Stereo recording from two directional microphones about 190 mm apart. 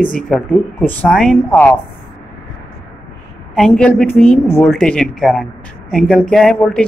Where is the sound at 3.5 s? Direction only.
5° left (ahead or behind).